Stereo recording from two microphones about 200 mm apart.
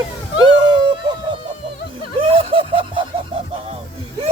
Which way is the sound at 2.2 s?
25° right (ahead or behind).